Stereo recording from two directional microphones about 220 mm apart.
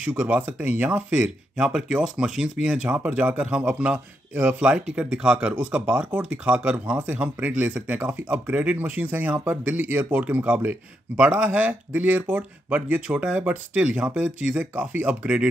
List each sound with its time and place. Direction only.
0.0 s speech: 5° right (ahead or behind)